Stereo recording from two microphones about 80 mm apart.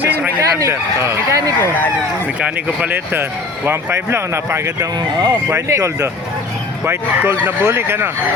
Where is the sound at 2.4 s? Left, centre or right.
Centre.